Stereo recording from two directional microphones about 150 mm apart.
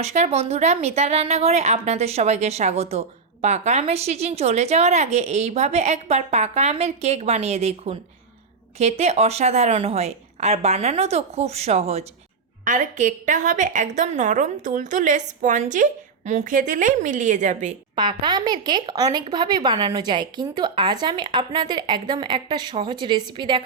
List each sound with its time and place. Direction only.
0.0 s a woman's voice: 45° right (ahead or behind)
12.6 s a woman's voice: 60° right (ahead or behind)
17.9 s speech: 30° right (ahead or behind)